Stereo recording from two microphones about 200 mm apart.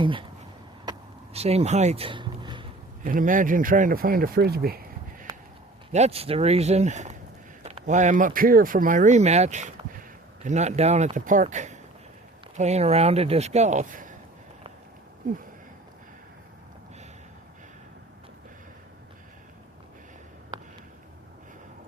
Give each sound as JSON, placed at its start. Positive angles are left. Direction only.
{"t": 0.0, "sound": "speech", "side_deg": -25}
{"t": 0.9, "sound": "a sound", "side_deg": -30}
{"t": 3.0, "sound": "speech", "side_deg": -45}
{"t": 5.9, "sound": "speech", "side_deg": -30}